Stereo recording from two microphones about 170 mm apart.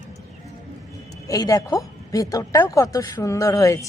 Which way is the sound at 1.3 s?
20° left (ahead or behind).